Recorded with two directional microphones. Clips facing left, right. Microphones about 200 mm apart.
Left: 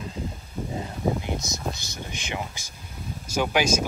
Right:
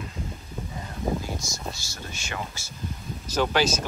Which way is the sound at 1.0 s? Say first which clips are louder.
Left 1 dB; 20° left (ahead or behind).